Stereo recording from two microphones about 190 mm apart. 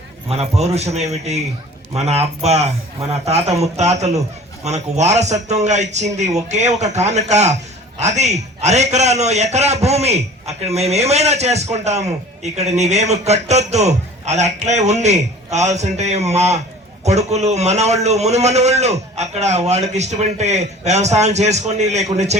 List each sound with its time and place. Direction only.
0.3 s a man's voice: 35° right (ahead or behind)